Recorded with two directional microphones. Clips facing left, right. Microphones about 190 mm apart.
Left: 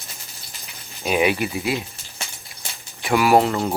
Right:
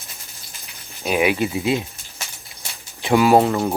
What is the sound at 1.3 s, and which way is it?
Speech, 20° right (ahead or behind).